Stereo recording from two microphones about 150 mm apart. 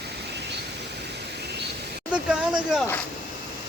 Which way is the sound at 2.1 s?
5° right (ahead or behind).